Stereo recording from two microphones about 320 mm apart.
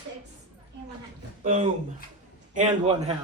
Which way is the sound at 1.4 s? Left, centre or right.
Right.